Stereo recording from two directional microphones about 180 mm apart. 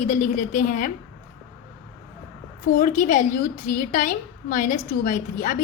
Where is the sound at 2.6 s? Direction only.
45° left (ahead or behind).